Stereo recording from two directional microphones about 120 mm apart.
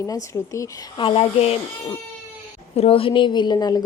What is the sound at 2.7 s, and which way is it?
A woman's voice, 55° left (ahead or behind).